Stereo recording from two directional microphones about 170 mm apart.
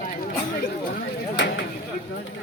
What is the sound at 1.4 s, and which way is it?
Speech, 90° left.